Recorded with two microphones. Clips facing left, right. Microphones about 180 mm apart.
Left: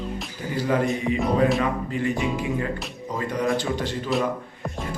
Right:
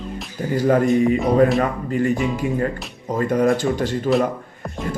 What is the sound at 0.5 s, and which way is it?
A man's voice, 45° right (ahead or behind).